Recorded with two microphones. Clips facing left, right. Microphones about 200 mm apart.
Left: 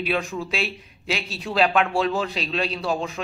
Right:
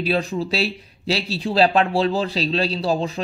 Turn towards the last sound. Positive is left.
turn(degrees=-35)  # may be behind; listen again after turning